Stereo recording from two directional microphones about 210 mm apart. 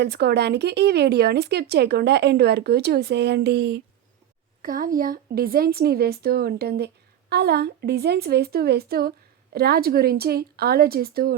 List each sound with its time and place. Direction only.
0.0 s a woman's voice: 50° right (ahead or behind)
4.6 s a woman's voice: 40° right (ahead or behind)